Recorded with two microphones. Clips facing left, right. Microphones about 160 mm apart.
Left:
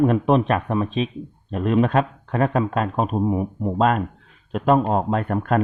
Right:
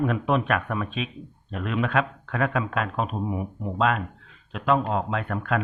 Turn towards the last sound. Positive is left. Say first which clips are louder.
# left 6 dB
turn(degrees=45)  # may be behind; listen again after turning